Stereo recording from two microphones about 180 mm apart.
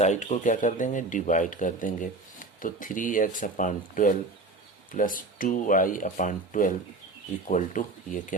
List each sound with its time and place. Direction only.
0.0 s speech: 40° left (ahead or behind)